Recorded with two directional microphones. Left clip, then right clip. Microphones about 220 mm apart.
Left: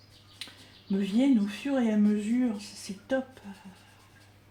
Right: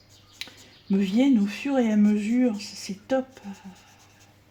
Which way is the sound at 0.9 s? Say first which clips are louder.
Right 4 dB; 50° right (ahead or behind).